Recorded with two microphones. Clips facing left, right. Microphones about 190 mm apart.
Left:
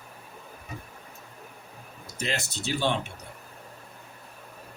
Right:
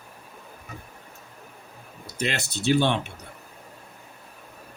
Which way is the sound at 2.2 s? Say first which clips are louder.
Right 4 dB; 65° right (ahead or behind).